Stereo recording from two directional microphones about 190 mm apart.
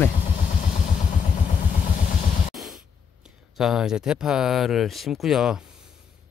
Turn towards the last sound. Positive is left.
turn(degrees=-5)  # may be behind; listen again after turning